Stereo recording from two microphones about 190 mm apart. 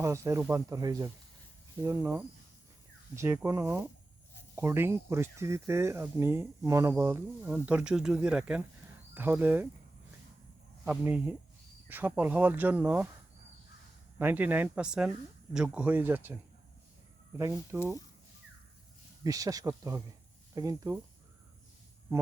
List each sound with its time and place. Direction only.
0.0 s speech: 15° right (ahead or behind)
10.8 s speech: 5° right (ahead or behind)
14.2 s speech: 10° right (ahead or behind)
19.2 s speech: 20° right (ahead or behind)